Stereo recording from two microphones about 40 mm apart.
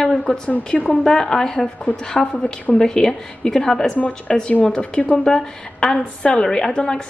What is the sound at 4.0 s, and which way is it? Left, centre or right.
A woman's voice, left.